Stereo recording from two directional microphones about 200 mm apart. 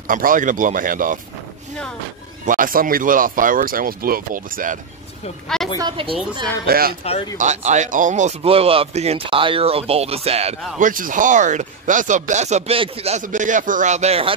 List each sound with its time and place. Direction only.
0.1 s speech: 40° right (ahead or behind)
2.4 s speech: 45° right (ahead or behind)
5.8 s speech: 25° right (ahead or behind)
6.6 s speech: 50° right (ahead or behind)
7.3 s speech: 35° right (ahead or behind)
10.8 s speech: 40° right (ahead or behind)